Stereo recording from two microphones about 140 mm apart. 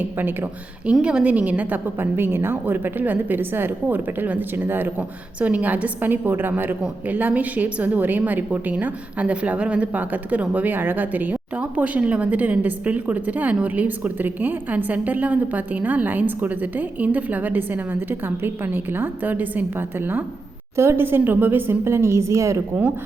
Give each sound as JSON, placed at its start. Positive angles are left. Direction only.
{"t": 0.9, "sound": "a woman's voice", "side_deg": -5}